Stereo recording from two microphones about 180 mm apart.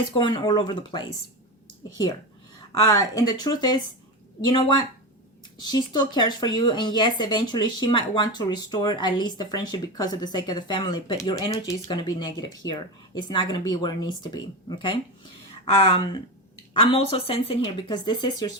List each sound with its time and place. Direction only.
0.2 s speech: 25° left (ahead or behind)
2.8 s speech: 20° left (ahead or behind)